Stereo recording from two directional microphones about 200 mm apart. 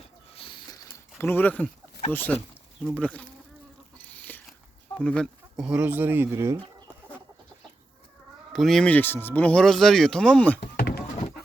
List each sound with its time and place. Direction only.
0.3 s mechanisms: 25° left (ahead or behind)
1.2 s speech: 10° left (ahead or behind)
4.0 s a sound: 10° left (ahead or behind)
4.9 s speech: 5° left (ahead or behind); by 6.6 s 15° right (ahead or behind)
8.5 s speech: centre (ahead or behind)
10.8 s door: 55° left (ahead or behind)